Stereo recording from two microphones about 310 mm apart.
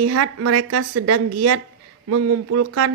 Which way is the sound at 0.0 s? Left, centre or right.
Right.